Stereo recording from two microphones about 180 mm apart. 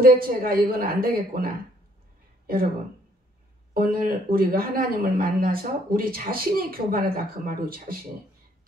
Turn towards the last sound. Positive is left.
turn(degrees=-55)  # may be behind; listen again after turning